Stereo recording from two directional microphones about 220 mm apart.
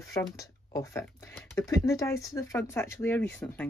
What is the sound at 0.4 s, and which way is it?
Speech, 15° left (ahead or behind).